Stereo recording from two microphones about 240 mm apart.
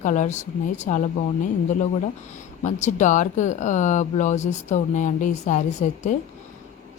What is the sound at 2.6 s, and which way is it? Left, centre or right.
A woman's voice, left.